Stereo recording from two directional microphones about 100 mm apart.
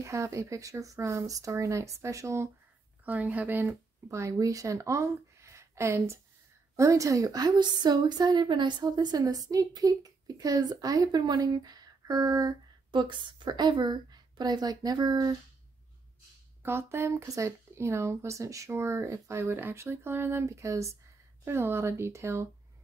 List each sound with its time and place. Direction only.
0.0 s a woman's voice: 30° right (ahead or behind)
3.1 s a woman's voice: 15° right (ahead or behind); by 15.3 s 40° right (ahead or behind)
16.6 s speech: 25° right (ahead or behind)